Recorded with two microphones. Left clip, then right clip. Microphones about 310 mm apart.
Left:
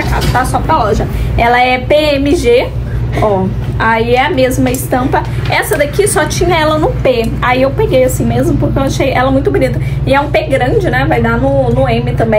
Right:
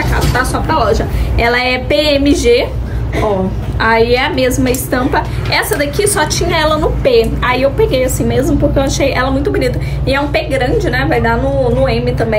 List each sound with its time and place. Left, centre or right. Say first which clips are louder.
0.5 s a woman's voice: left 2 dB; centre
3.8 s a woman's voice: left 1 dB; centre